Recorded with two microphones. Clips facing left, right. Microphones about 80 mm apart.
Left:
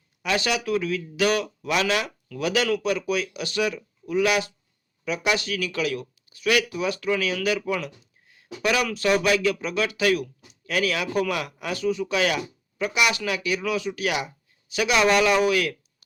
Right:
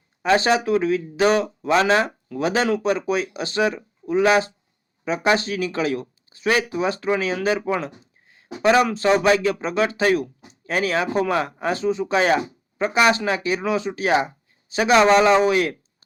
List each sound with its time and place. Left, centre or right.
0.2 s speech: right